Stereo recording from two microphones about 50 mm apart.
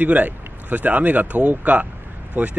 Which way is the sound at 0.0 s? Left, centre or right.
Right.